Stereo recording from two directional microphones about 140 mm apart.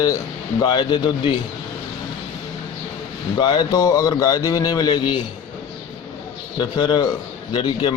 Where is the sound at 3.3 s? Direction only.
35° left (ahead or behind).